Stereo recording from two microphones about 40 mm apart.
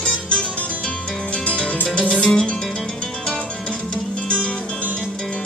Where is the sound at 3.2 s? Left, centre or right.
Left.